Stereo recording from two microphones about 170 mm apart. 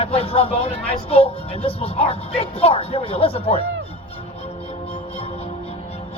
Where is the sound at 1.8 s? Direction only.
40° left (ahead or behind).